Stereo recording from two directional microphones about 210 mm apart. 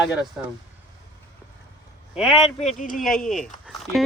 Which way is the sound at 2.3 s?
30° left (ahead or behind).